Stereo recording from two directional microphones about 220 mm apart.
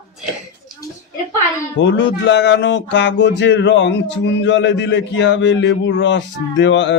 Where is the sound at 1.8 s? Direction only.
55° left (ahead or behind).